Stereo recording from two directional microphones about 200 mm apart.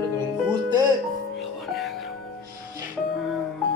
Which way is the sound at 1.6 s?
Centre (ahead or behind).